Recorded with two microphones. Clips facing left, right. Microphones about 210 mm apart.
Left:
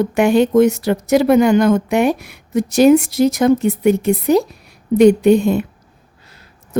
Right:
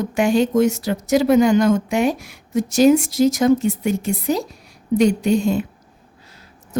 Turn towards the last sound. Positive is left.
turn(degrees=60)  # may be behind; listen again after turning